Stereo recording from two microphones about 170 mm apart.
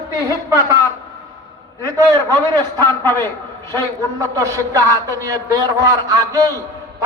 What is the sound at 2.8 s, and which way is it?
Speech, 15° left (ahead or behind).